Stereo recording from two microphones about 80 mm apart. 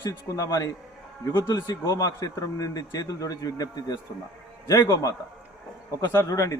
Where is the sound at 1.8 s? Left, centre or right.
Left.